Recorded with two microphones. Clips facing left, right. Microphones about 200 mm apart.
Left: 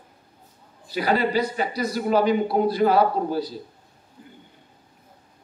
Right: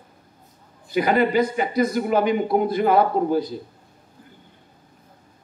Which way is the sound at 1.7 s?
50° right (ahead or behind).